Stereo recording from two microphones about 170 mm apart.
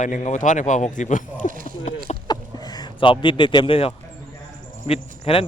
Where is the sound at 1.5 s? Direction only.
55° right (ahead or behind).